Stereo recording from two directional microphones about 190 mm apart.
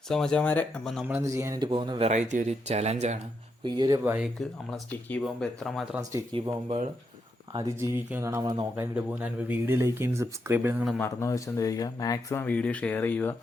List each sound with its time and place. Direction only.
0.1 s speech: 5° left (ahead or behind)
1.0 s a man's voice: 15° right (ahead or behind)
2.0 s speech: 40° right (ahead or behind)
3.6 s speech: 20° right (ahead or behind)
4.9 s speech: 10° left (ahead or behind)
6.0 s speech: 15° right (ahead or behind)
6.3 s speech: 30° right (ahead or behind)
7.5 s speech: 15° right (ahead or behind)
11.0 s speech: 15° left (ahead or behind)